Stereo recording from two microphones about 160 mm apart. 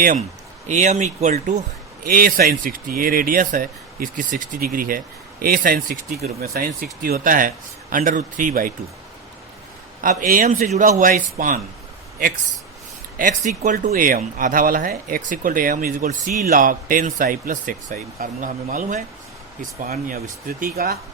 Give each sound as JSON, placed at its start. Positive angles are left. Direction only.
{"t": 0.7, "sound": "speech", "side_deg": -50}
{"t": 2.0, "sound": "speech", "side_deg": -65}
{"t": 10.0, "sound": "speech", "side_deg": -55}
{"t": 13.1, "sound": "speech", "side_deg": -55}
{"t": 19.8, "sound": "speech", "side_deg": -65}